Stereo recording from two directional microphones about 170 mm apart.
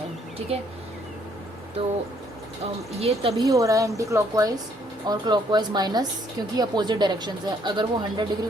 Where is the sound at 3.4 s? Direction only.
20° right (ahead or behind).